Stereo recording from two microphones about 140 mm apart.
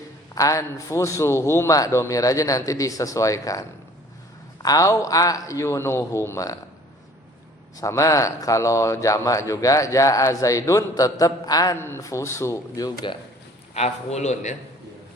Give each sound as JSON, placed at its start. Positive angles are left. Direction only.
{"t": 0.3, "sound": "a man's voice", "side_deg": 25}
{"t": 4.6, "sound": "a man's voice", "side_deg": 25}
{"t": 7.8, "sound": "a man's voice", "side_deg": 25}
{"t": 13.7, "sound": "a man's voice", "side_deg": 50}